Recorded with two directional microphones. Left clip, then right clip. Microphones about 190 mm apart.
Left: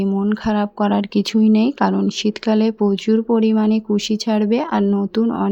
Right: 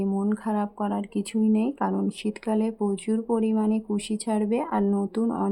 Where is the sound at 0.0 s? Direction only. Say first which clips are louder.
Left 7 dB; 20° left (ahead or behind).